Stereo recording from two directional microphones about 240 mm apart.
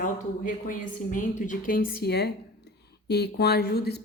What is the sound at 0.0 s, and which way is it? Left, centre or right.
Speech, left.